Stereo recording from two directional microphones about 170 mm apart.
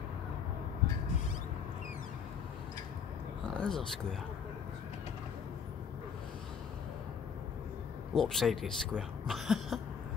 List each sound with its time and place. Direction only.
3.5 s speech: 5° left (ahead or behind)
8.1 s speech: centre (ahead or behind)